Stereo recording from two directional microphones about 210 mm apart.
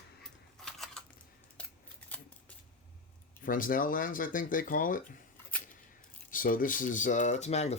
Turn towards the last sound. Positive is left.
turn(degrees=30)  # may be behind; listen again after turning